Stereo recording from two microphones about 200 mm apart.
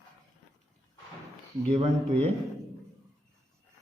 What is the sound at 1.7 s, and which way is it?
Speech, 35° right (ahead or behind).